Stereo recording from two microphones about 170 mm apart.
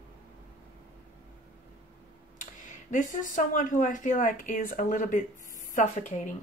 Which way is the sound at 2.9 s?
50° left (ahead or behind).